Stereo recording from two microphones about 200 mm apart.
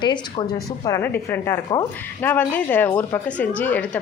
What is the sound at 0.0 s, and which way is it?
Speech, 25° left (ahead or behind).